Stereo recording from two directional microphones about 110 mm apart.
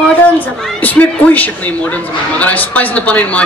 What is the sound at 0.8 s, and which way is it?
Speech, 15° left (ahead or behind).